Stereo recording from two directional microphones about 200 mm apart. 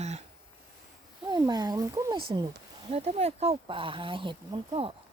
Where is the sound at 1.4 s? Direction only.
20° right (ahead or behind).